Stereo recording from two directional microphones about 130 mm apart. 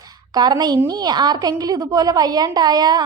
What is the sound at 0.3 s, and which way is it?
A woman's voice, 30° right (ahead or behind).